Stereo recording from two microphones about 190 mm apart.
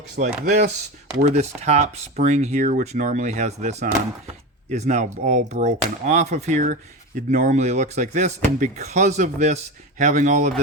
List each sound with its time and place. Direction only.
0.2 s speech: 40° right (ahead or behind)